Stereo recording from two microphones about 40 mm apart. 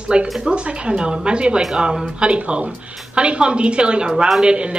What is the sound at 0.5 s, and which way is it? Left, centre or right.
Speech, right.